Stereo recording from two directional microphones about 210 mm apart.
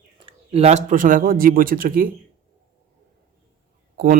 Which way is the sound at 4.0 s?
45° right (ahead or behind).